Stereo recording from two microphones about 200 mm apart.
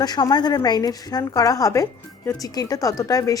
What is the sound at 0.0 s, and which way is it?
A woman's voice, 20° left (ahead or behind).